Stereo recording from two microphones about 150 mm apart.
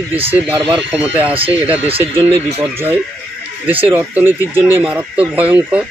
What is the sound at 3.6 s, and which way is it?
Speech, 10° right (ahead or behind).